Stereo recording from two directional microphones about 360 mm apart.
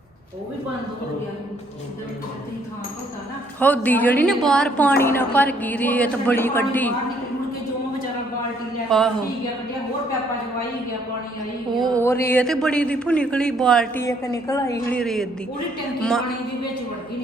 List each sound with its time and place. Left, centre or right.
3.6 s speech: centre
8.9 s speech: centre
11.8 s speech: centre